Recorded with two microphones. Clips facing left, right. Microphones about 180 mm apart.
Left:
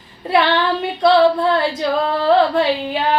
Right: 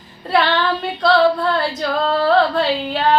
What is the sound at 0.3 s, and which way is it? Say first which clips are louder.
Female singing: left 1 dB; 15° left (ahead or behind).